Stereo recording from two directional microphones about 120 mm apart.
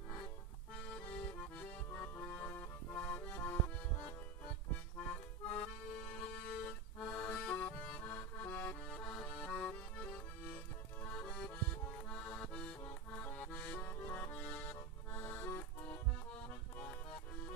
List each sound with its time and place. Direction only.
0.8 s accordion: 10° left (ahead or behind)
4.9 s accordion: 10° left (ahead or behind)
16.7 s music: 15° left (ahead or behind)